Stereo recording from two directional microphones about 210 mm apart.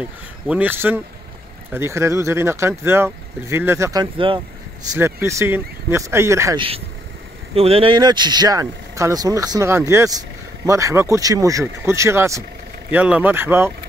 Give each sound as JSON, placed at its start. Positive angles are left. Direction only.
{"t": 0.5, "sound": "speech", "side_deg": -10}
{"t": 7.5, "sound": "speech", "side_deg": -30}